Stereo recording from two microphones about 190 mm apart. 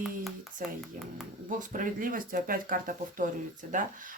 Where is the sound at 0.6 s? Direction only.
45° right (ahead or behind).